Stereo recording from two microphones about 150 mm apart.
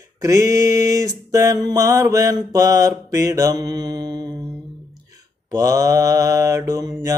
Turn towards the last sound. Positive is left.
turn(degrees=-25)  # may be behind; listen again after turning